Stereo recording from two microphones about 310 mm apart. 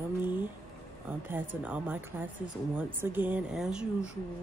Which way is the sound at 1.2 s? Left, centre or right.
Centre.